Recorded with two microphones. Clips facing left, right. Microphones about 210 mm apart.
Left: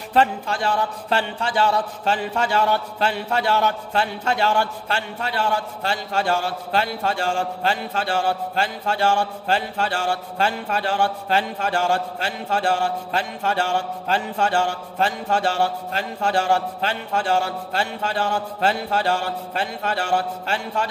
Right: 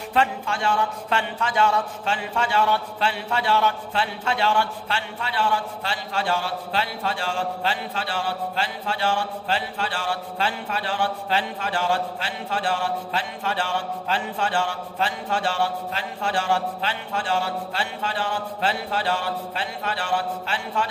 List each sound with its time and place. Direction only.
0.1 s a man's voice: 40° left (ahead or behind)